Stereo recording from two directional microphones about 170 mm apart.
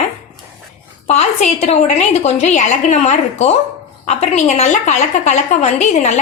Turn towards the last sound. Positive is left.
turn(degrees=45)  # may be behind; listen again after turning